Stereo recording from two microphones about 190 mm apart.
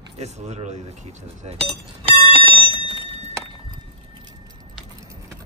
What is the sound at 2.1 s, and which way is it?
Alarm clock, 30° right (ahead or behind).